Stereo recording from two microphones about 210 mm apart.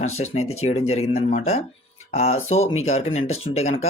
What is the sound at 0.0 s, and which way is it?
Speech, 30° left (ahead or behind).